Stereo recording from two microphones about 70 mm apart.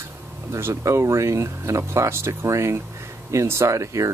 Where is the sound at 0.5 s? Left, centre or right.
Right.